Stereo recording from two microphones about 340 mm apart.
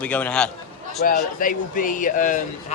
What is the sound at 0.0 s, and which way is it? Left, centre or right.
Speech, centre.